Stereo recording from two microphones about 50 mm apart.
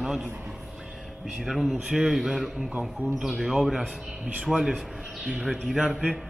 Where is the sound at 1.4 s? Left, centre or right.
Centre.